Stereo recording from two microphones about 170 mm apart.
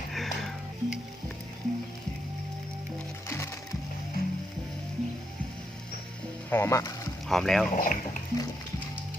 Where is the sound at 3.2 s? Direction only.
15° left (ahead or behind).